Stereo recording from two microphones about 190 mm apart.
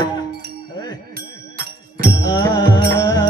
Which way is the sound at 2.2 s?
20° left (ahead or behind).